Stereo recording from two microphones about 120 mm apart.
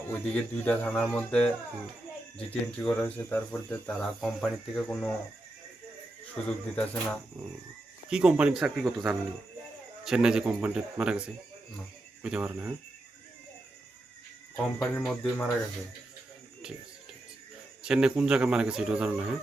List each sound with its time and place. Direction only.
0.3 s speech: 10° left (ahead or behind)
4.0 s speech: 5° left (ahead or behind)
6.3 s speech: 5° left (ahead or behind)
8.1 s a man's voice: 10° right (ahead or behind)
12.2 s a man's voice: 10° right (ahead or behind)
14.5 s speech: 15° left (ahead or behind)
15.0 s speech: 5° left (ahead or behind)
17.8 s a man's voice: 5° right (ahead or behind)